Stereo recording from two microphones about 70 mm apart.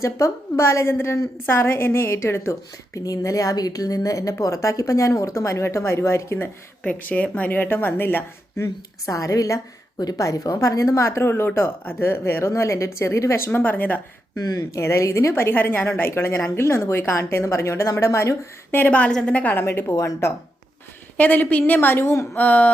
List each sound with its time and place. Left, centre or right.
0.0 s a woman's voice: left
6.8 s speech: left
9.0 s a woman's voice: left
14.3 s a woman's voice: left
18.7 s speech: left
19.6 s a woman's voice: left
21.2 s a woman's voice: left
22.1 s a woman's voice: left
22.4 s speech: left